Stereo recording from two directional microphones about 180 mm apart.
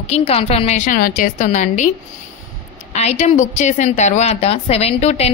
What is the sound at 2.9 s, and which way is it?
A woman's voice, 40° left (ahead or behind).